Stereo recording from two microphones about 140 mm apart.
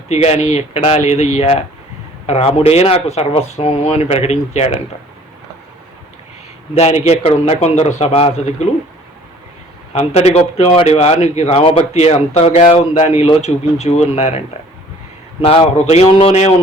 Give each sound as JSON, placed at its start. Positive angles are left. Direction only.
{"t": 0.1, "sound": "a man's voice", "side_deg": 50}
{"t": 6.7, "sound": "a man's voice", "side_deg": 50}
{"t": 9.9, "sound": "a man's voice", "side_deg": 45}
{"t": 15.4, "sound": "a man's voice", "side_deg": 45}